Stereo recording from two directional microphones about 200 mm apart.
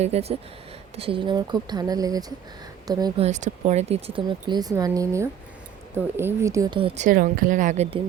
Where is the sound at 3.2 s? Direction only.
35° right (ahead or behind).